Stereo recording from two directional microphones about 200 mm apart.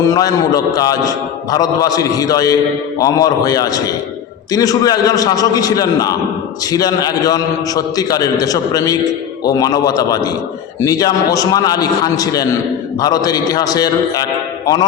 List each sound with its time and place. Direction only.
0.0 s a man's voice: 15° left (ahead or behind)